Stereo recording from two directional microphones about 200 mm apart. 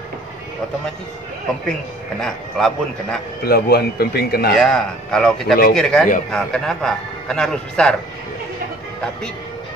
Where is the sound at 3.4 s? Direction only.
50° left (ahead or behind).